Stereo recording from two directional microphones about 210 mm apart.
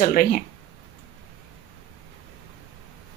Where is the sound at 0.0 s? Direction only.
40° left (ahead or behind).